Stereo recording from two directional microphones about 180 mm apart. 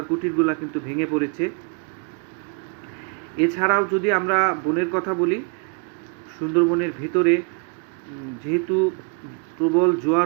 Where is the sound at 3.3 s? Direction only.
5° right (ahead or behind).